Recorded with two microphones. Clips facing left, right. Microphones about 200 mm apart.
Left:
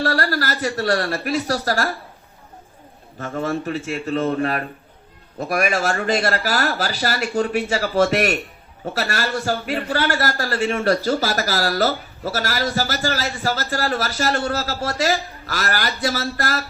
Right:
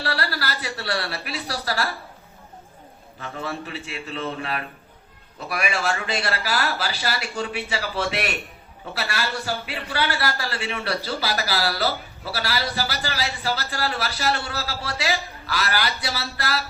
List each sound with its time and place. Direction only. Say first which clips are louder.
0.0 s a man's voice: left 6 dB; 45° left (ahead or behind)
3.2 s a man's voice: left 7 dB; 45° left (ahead or behind)